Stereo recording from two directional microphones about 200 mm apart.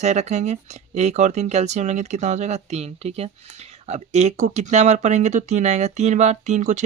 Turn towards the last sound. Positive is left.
turn(degrees=-35)  # may be behind; listen again after turning